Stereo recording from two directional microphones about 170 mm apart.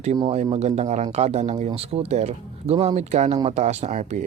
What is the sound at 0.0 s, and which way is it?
Speech, 40° right (ahead or behind).